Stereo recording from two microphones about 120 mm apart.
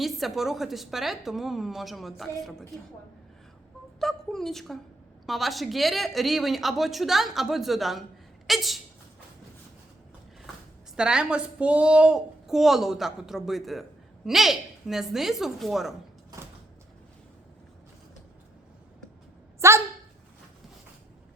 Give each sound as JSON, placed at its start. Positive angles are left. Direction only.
{"t": 0.0, "sound": "a woman's voice", "side_deg": 0}
{"t": 4.0, "sound": "a woman's voice", "side_deg": 0}
{"t": 10.9, "sound": "a woman's voice", "side_deg": -5}
{"t": 19.6, "sound": "a woman's voice", "side_deg": -25}